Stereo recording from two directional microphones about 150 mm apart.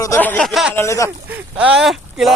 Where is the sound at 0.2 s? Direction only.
10° left (ahead or behind).